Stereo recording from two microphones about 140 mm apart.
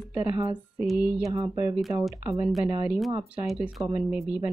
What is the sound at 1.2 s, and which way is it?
Speech, 25° right (ahead or behind).